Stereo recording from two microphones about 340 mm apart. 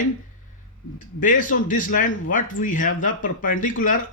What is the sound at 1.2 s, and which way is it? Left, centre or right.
Speech, left.